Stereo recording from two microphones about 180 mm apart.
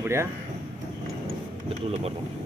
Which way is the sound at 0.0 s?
15° right (ahead or behind).